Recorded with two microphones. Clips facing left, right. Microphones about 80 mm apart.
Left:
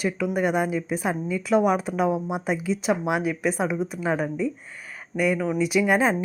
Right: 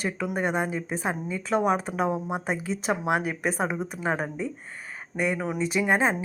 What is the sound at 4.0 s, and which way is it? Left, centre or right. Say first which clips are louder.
A woman's voice: left 2 dB; right.